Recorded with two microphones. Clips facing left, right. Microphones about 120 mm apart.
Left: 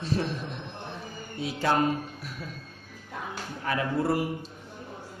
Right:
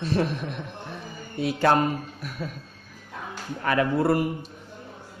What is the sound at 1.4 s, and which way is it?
Mantra, 65° right (ahead or behind).